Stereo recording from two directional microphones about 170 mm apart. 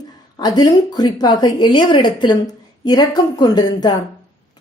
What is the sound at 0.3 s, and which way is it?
A woman's voice, 25° left (ahead or behind).